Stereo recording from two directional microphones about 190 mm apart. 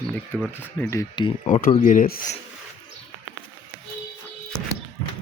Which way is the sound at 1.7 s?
40° left (ahead or behind).